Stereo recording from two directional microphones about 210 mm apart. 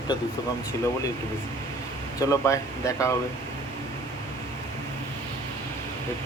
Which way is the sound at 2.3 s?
15° left (ahead or behind).